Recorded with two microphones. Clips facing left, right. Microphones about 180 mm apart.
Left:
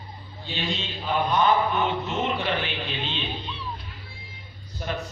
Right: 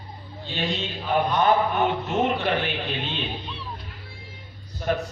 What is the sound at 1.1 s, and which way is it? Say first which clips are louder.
A man's voice: right 1 dB; 50° right (ahead or behind).